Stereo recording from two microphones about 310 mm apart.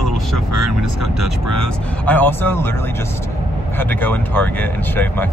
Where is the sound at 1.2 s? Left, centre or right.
Right.